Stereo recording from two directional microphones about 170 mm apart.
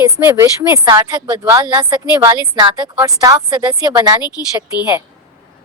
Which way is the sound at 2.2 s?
25° right (ahead or behind).